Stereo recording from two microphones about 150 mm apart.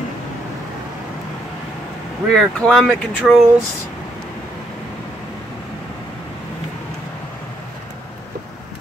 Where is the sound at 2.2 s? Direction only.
5° left (ahead or behind).